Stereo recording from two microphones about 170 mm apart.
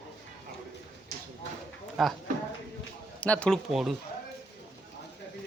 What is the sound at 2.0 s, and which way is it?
Speech, centre (ahead or behind).